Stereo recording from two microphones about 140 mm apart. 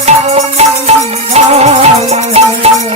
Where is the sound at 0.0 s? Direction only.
50° right (ahead or behind).